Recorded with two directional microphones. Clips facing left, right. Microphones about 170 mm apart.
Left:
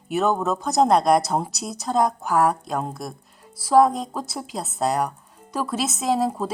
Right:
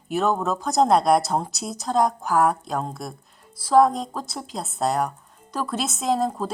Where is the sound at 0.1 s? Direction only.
Centre (ahead or behind).